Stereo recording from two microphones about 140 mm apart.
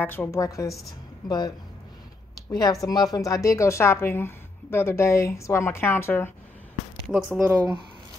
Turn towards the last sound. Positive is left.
turn(degrees=-20)  # may be behind; listen again after turning